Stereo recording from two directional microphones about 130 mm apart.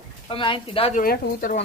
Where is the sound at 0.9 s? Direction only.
85° left.